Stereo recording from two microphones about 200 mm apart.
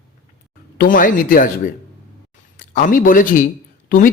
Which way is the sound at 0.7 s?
40° left (ahead or behind).